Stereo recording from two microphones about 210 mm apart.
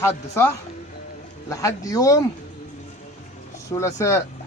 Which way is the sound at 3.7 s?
15° left (ahead or behind).